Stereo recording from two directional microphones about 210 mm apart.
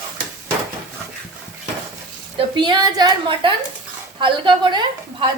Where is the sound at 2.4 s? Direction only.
20° right (ahead or behind).